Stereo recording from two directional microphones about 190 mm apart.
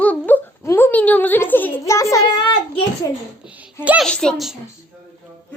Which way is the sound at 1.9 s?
15° left (ahead or behind).